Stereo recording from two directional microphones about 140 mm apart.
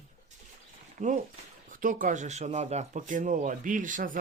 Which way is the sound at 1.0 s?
60° right (ahead or behind).